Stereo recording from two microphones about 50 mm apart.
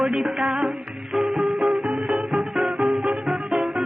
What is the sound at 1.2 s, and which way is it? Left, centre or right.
Music, right.